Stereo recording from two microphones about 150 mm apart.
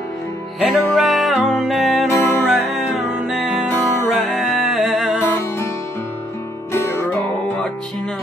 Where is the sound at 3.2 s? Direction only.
5° right (ahead or behind).